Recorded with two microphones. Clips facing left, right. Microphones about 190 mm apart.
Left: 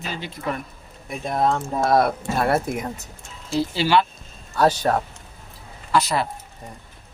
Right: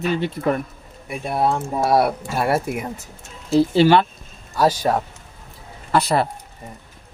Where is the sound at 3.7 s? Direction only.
50° right (ahead or behind).